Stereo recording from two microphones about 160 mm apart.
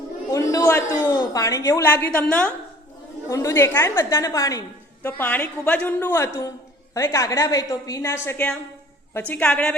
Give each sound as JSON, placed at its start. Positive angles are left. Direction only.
{"t": 0.3, "sound": "a woman's voice", "side_deg": 20}
{"t": 3.2, "sound": "a woman's voice", "side_deg": 20}